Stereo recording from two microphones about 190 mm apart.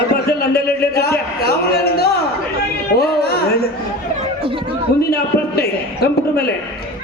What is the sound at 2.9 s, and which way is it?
Music, 55° left (ahead or behind).